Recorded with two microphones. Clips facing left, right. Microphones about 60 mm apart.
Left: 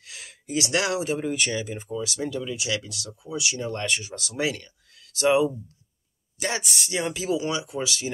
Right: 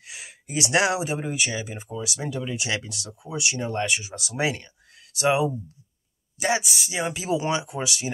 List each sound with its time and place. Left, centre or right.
0.0 s speech: centre
2.4 s speech: right
3.8 s speech: centre
7.3 s speech: right